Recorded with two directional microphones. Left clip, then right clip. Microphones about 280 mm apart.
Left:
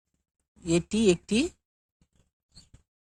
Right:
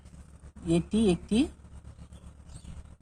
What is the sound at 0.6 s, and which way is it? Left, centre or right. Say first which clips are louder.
Speech: left 3 dB; left.